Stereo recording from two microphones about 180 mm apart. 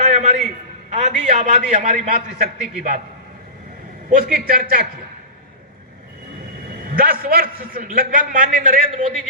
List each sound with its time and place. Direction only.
0.0 s a man's voice: 40° right (ahead or behind)
4.3 s a man's voice: 55° right (ahead or behind)
6.9 s a man's voice: 55° right (ahead or behind)